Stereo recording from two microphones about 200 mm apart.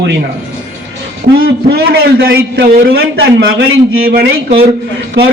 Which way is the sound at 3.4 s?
80° right.